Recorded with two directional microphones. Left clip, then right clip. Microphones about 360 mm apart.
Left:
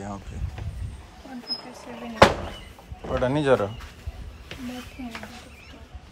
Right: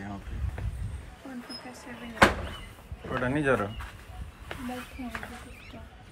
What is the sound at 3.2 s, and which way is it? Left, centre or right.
Speech, centre.